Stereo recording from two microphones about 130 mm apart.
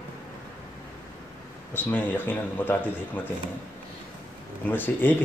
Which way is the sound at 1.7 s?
15° left (ahead or behind).